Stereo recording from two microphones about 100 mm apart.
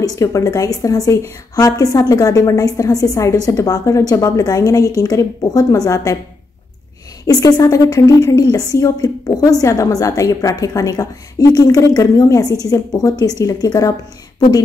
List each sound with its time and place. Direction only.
0.0 s a woman's voice: 35° left (ahead or behind)
7.2 s a woman's voice: 40° left (ahead or behind)